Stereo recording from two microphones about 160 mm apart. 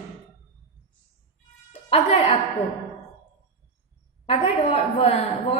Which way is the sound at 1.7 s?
40° left (ahead or behind).